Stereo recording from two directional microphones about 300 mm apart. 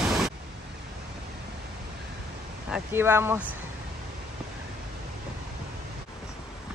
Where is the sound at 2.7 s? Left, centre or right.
Centre.